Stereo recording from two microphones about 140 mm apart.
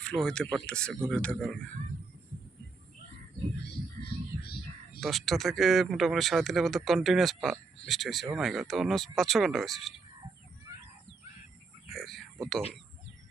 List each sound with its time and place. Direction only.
0.0 s a man's voice: 5° left (ahead or behind)
4.9 s speech: centre (ahead or behind)
11.9 s a sound: centre (ahead or behind)